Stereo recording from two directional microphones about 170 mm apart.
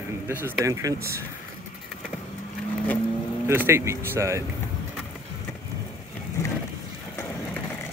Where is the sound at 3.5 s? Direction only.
15° right (ahead or behind).